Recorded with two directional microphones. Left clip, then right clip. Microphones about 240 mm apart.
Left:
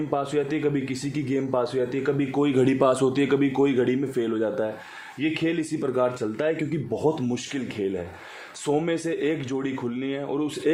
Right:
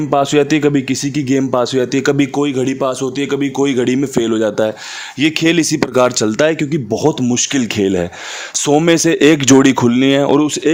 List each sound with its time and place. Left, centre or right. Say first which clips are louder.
0.1 s speech: right 14 dB; right
2.3 s a man's voice: right 5 dB; right